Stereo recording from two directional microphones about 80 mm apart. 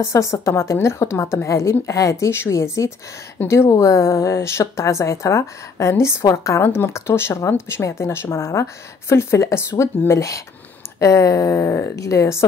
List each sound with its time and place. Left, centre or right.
0.1 s a woman's voice: left